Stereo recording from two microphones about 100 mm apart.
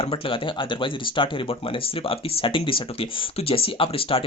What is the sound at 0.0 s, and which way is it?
Speech, 60° left (ahead or behind).